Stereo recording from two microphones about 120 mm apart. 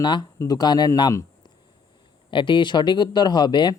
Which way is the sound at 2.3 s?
45° left (ahead or behind).